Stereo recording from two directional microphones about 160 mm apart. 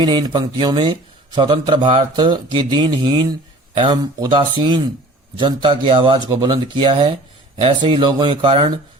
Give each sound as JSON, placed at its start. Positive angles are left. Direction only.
{"t": 0.0, "sound": "speech", "side_deg": -30}